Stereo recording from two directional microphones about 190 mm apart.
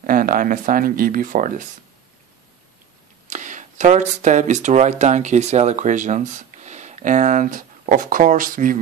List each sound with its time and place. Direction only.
0.0 s speech: 50° right (ahead or behind)
3.3 s speech: 40° right (ahead or behind)